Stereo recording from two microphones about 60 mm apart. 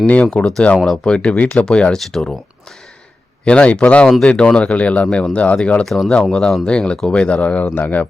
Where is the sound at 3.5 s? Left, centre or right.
Centre.